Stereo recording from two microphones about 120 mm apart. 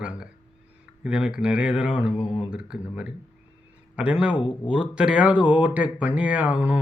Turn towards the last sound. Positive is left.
turn(degrees=-10)  # may be behind; listen again after turning